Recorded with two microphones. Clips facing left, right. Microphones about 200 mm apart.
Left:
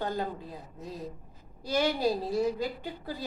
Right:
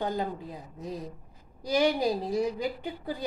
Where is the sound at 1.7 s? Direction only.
15° right (ahead or behind).